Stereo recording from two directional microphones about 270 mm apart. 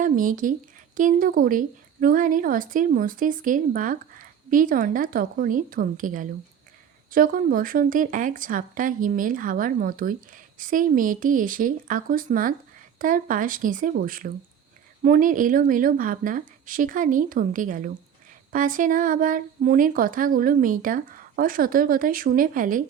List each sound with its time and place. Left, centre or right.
0.0 s a woman's voice: right